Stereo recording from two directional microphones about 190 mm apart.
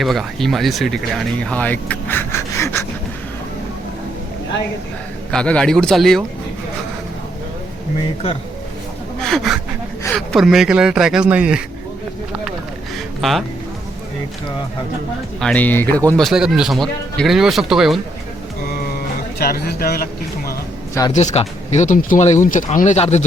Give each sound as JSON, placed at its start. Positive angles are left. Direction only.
{"t": 0.0, "sound": "speech", "side_deg": 0}
{"t": 5.3, "sound": "speech", "side_deg": 5}
{"t": 9.2, "sound": "speech", "side_deg": 0}
{"t": 13.2, "sound": "speech", "side_deg": 0}
{"t": 15.4, "sound": "speech", "side_deg": 5}
{"t": 16.1, "sound": "speech", "side_deg": 0}
{"t": 19.4, "sound": "speech", "side_deg": 55}
{"t": 21.1, "sound": "speech", "side_deg": 40}